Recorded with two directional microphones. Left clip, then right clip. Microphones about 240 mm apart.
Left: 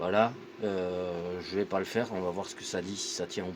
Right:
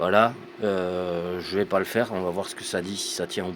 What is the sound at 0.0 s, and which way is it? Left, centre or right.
A man's voice, right.